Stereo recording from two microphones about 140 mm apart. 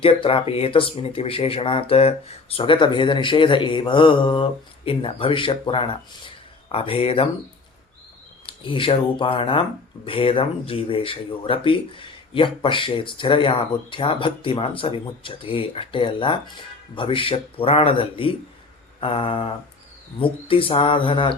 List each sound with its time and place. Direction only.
0.0 s speech: 40° left (ahead or behind)
8.4 s speech: 40° left (ahead or behind)